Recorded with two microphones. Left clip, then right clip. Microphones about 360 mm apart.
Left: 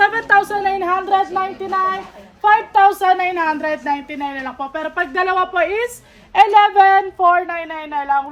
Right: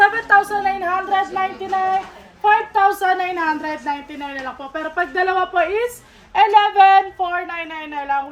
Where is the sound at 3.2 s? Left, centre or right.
Left.